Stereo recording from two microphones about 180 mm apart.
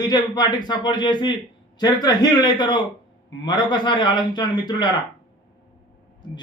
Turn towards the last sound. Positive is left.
turn(degrees=25)  # may be behind; listen again after turning